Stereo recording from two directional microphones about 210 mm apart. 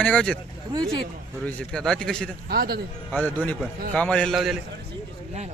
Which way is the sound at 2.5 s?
45° right (ahead or behind).